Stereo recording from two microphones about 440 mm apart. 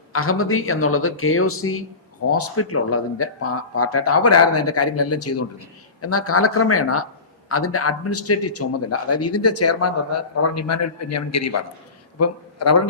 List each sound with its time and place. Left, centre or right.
0.1 s a man's voice: left